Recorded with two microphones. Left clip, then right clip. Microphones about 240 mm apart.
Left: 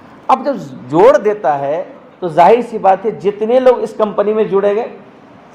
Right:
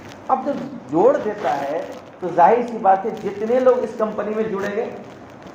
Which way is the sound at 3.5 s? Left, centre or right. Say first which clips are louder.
Left 5 dB; left.